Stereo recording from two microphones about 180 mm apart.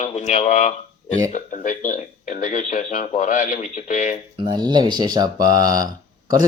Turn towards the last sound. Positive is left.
turn(degrees=-20)  # may be behind; listen again after turning